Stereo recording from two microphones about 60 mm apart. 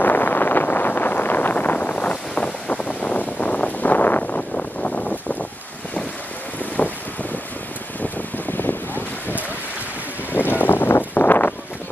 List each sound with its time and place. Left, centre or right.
0.0 s vehicle: left
4.2 s a sound: left
8.0 s boat: left